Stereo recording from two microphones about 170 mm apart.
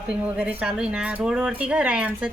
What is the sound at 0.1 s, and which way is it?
Speech, 5° right (ahead or behind).